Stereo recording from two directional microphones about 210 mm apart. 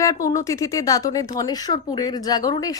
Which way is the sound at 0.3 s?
15° left (ahead or behind).